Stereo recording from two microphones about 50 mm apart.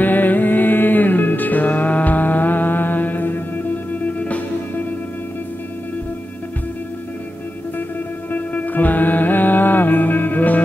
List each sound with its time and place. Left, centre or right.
0.0 s music: left
8.3 s music: left